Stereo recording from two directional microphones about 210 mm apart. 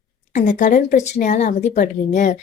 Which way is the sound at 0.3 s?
35° left (ahead or behind).